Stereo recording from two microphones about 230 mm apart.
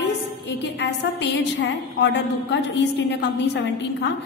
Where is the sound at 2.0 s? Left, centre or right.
Left.